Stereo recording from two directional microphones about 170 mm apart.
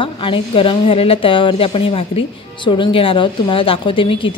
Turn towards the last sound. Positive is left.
turn(degrees=30)  # may be behind; listen again after turning